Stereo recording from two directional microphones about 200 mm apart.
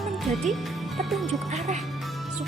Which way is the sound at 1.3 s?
35° right (ahead or behind).